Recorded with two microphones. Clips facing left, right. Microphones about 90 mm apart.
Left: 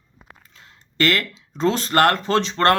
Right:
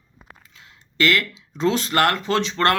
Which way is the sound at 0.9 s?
40° left (ahead or behind).